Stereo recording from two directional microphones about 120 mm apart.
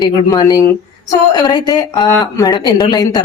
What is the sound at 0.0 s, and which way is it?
Speech, 35° left (ahead or behind).